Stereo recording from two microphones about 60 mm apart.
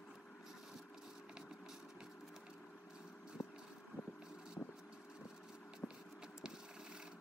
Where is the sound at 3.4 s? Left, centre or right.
Left.